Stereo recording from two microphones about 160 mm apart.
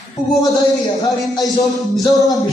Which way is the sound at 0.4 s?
25° left (ahead or behind).